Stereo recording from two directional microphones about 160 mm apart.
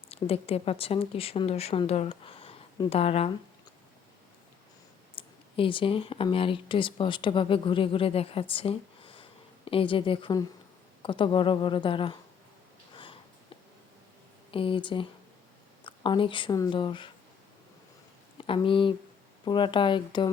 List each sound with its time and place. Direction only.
0.1 s speech: 40° left (ahead or behind)
5.1 s speech: 35° left (ahead or behind)
14.5 s speech: 35° left (ahead or behind)
18.3 s speech: 30° left (ahead or behind)